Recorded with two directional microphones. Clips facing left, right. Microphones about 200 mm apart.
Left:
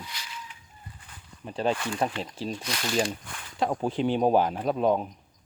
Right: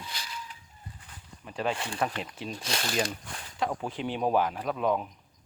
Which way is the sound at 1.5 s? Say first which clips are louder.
Left 4 dB; 30° left (ahead or behind).